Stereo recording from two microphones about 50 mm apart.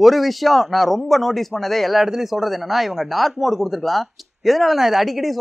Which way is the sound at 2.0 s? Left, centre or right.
Centre.